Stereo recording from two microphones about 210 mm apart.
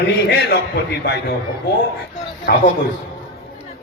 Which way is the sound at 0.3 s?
50° left (ahead or behind).